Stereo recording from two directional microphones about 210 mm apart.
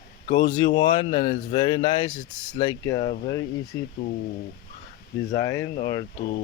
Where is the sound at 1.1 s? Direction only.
35° left (ahead or behind).